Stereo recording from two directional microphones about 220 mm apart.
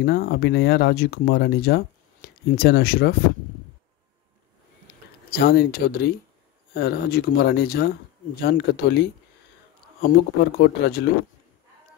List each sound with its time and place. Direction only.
0.0 s speech: 45° left (ahead or behind)
5.3 s speech: 45° left (ahead or behind)
10.0 s speech: 45° left (ahead or behind)